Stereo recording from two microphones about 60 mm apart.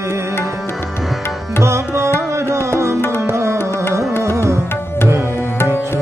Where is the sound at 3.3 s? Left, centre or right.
Right.